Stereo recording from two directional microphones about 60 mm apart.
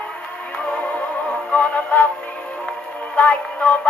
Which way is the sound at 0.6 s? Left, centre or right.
Centre.